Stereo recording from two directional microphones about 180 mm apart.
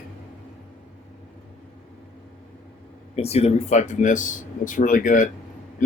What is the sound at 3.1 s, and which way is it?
Speech, 35° left (ahead or behind).